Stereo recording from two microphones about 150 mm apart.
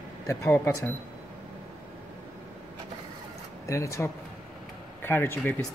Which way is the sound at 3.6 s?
20° left (ahead or behind).